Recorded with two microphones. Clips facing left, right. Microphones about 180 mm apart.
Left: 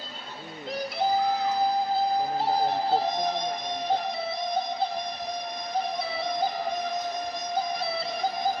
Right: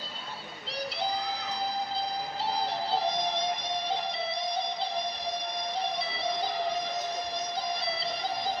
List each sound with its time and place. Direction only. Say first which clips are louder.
2.4 s music: left 6 dB; 50° left (ahead or behind)